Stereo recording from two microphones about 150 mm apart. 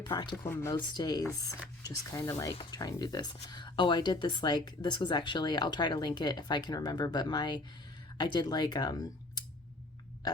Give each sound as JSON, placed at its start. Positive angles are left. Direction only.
{"t": 0.0, "sound": "speech", "side_deg": 30}
{"t": 0.4, "sound": "speech", "side_deg": 15}
{"t": 10.2, "sound": "a sound", "side_deg": 25}